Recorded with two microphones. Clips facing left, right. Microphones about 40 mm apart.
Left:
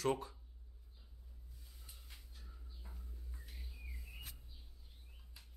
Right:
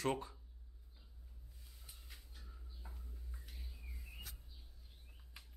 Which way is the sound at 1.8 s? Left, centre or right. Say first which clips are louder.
Right 1 dB; centre.